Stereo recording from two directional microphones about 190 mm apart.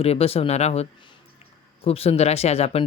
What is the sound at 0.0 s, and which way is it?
Speech, 30° left (ahead or behind).